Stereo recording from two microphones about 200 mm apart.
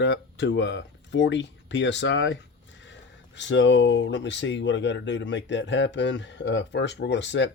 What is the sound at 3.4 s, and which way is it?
Speech, 65° left (ahead or behind).